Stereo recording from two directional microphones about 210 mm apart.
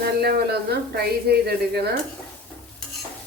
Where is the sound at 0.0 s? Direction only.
50° right (ahead or behind).